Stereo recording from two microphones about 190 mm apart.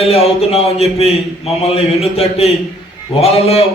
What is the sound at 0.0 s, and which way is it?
A man's voice, 30° left (ahead or behind).